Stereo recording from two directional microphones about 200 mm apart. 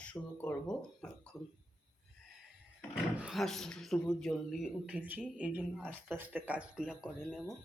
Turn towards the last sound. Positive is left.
turn(degrees=-5)  # may be behind; listen again after turning